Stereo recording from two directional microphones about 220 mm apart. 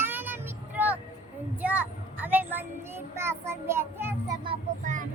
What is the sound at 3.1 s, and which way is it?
Child singing, 10° right (ahead or behind).